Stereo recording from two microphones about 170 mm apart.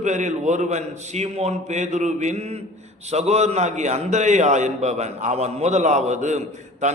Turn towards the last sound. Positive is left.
turn(degrees=-45)  # may be behind; listen again after turning